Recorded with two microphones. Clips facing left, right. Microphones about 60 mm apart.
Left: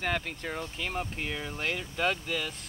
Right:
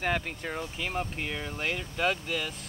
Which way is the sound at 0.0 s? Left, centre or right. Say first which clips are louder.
Right 1 dB; centre.